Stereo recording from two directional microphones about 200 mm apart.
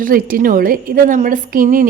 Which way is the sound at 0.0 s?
45° right (ahead or behind).